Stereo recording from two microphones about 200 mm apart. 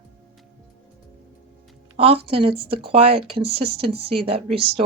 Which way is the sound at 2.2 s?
30° right (ahead or behind).